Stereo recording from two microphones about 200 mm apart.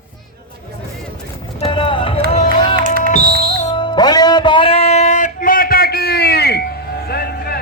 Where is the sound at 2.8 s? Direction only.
45° right (ahead or behind).